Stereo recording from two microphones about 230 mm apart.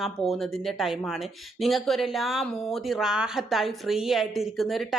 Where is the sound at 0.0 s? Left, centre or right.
Centre.